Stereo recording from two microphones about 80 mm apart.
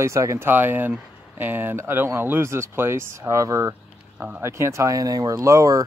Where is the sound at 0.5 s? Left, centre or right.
Right.